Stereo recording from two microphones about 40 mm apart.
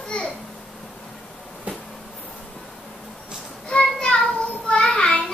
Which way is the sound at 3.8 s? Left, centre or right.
Left.